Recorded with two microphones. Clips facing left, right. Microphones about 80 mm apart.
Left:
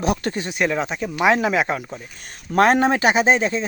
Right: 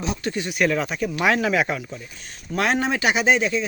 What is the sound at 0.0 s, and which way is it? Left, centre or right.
Speech, left.